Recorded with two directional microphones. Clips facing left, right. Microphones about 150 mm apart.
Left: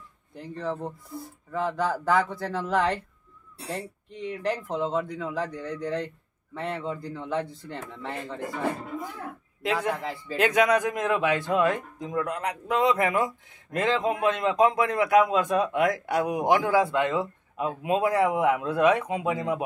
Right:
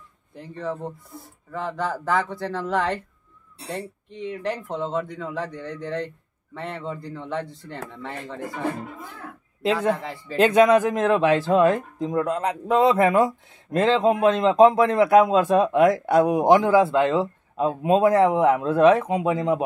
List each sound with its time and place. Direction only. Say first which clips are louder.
0.4 s speech: right 1 dB; centre (ahead or behind)
4.2 s speech: right 1 dB; centre (ahead or behind)
9.9 s speech: even; centre (ahead or behind)
10.3 s speech: right 6 dB; 30° right (ahead or behind)
16.6 s speech: right 5 dB; 25° right (ahead or behind)